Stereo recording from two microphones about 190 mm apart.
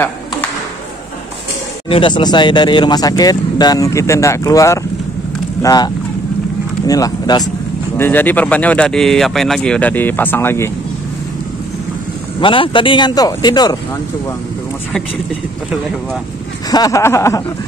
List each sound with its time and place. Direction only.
1.9 s speech: 25° left (ahead or behind)
6.9 s speech: 20° left (ahead or behind)
8.0 s speech: 10° left (ahead or behind)
12.4 s speech: 25° left (ahead or behind)
16.7 s speech: 20° left (ahead or behind)